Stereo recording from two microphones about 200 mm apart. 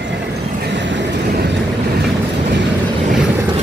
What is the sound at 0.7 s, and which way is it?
Vehicle, 65° right (ahead or behind).